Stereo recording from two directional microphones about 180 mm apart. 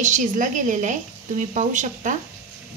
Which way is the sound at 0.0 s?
45° right (ahead or behind).